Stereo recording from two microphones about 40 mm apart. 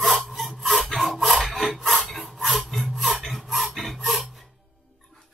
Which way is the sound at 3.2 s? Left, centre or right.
Centre.